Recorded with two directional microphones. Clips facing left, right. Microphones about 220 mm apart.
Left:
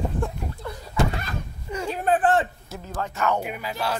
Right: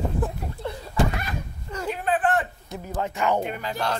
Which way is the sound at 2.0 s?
45° left (ahead or behind).